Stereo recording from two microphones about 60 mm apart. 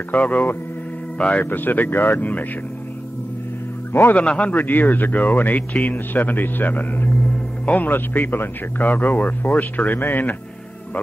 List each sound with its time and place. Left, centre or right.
0.1 s speech: left
1.1 s a man's voice: centre
1.4 s speech: left
4.1 s a man's voice: centre
7.9 s speech: left